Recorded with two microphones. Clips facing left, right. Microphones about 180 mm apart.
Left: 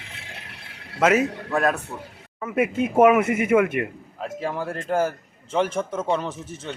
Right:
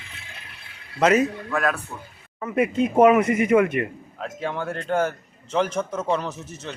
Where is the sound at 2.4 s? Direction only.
10° left (ahead or behind).